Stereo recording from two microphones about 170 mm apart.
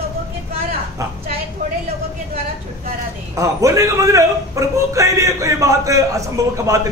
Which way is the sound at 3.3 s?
20° right (ahead or behind).